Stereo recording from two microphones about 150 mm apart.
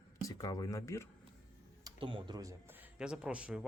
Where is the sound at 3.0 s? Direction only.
5° right (ahead or behind).